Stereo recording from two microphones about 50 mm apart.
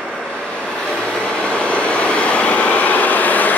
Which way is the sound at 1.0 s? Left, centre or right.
Centre.